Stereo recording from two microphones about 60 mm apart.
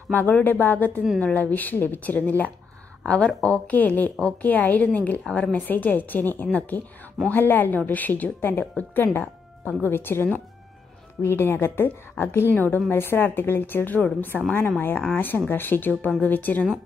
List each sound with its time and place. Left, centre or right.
0.1 s a woman's voice: left
3.7 s a woman's voice: left
11.2 s a woman's voice: left
14.3 s a woman's voice: centre
14.8 s a woman's voice: left